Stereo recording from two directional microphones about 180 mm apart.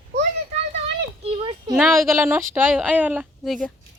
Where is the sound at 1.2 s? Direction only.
35° right (ahead or behind).